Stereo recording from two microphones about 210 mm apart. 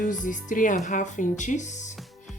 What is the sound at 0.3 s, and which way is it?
A woman's voice, 40° left (ahead or behind).